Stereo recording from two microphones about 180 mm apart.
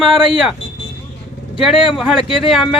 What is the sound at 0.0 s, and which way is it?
Speech, centre (ahead or behind).